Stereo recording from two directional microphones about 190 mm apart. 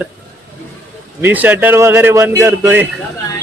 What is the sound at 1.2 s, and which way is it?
A man's voice, 10° right (ahead or behind).